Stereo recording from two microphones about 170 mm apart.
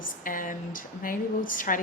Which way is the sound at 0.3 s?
55° left (ahead or behind).